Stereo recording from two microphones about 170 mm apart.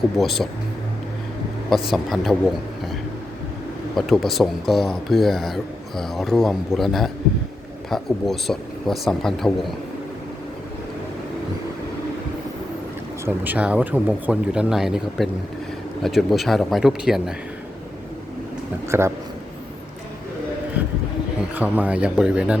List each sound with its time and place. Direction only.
0.2 s speech: centre (ahead or behind)
1.9 s speech: centre (ahead or behind)
3.9 s speech: centre (ahead or behind)
13.2 s speech: 10° right (ahead or behind)
18.9 s speech: 15° right (ahead or behind)
21.5 s speech: 10° right (ahead or behind)